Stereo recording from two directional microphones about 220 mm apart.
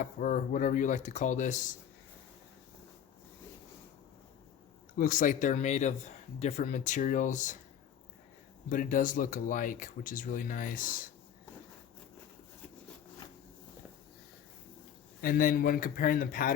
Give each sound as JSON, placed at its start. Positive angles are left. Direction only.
{"t": 0.0, "sound": "speech", "side_deg": 35}
{"t": 4.9, "sound": "speech", "side_deg": 40}
{"t": 8.7, "sound": "speech", "side_deg": 40}
{"t": 15.2, "sound": "speech", "side_deg": 40}